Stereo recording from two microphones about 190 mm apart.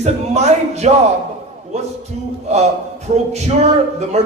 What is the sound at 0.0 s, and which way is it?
Speech, 35° right (ahead or behind).